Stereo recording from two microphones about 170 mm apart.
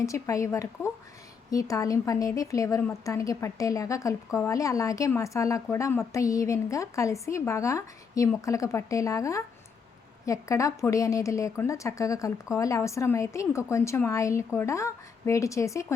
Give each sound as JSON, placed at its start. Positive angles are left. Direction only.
{"t": 0.0, "sound": "a woman's voice", "side_deg": 20}